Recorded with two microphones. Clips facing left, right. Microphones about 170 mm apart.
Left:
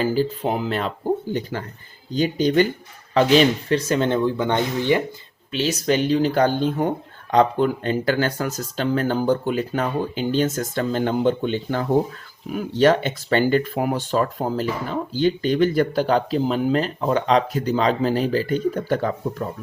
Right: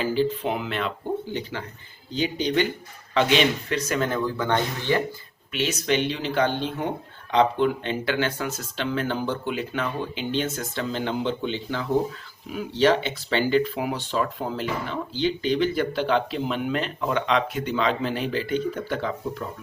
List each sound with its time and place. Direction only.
0.0 s speech: 40° left (ahead or behind); by 5.0 s 15° left (ahead or behind)
5.5 s speech: 35° left (ahead or behind)